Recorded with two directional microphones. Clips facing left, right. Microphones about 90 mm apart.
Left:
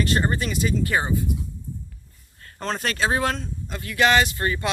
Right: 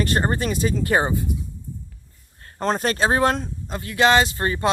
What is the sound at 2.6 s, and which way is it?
Speech, 35° right (ahead or behind).